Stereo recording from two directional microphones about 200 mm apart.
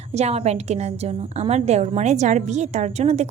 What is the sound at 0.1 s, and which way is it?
A woman's voice, 30° right (ahead or behind).